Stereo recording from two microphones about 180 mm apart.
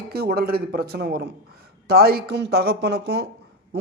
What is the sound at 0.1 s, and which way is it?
A man's voice, 60° right (ahead or behind).